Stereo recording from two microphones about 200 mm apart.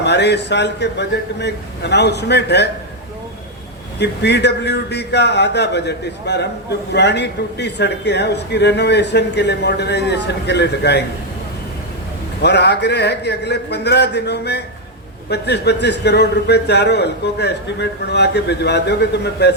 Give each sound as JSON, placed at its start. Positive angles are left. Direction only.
{"t": 0.0, "sound": "a man's voice", "side_deg": 55}
{"t": 4.0, "sound": "a man's voice", "side_deg": 55}
{"t": 12.4, "sound": "a man's voice", "side_deg": 55}